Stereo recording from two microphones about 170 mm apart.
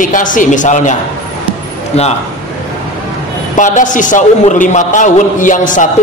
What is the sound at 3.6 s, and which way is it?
A man's voice, 50° left (ahead or behind).